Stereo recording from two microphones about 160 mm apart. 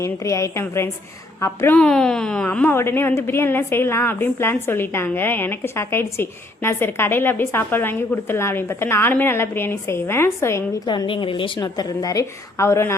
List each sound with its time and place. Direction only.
0.0 s a woman's voice: 20° left (ahead or behind)
10.8 s a woman's voice: 30° left (ahead or behind)